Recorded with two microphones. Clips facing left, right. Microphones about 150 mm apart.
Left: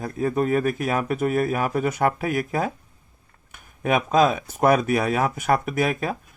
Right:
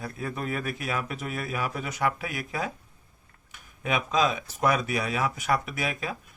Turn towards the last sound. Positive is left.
turn(degrees=50)  # may be behind; listen again after turning